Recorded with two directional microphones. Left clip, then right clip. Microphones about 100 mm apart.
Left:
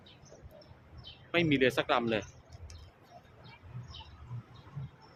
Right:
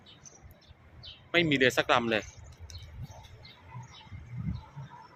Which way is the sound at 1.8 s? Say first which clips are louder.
Right 4 dB; 30° right (ahead or behind).